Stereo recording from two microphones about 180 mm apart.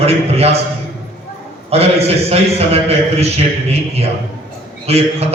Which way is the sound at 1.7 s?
35° right (ahead or behind).